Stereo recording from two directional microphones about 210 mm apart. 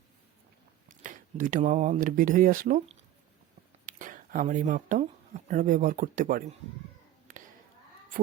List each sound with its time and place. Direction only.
0.9 s speech: 40° right (ahead or behind)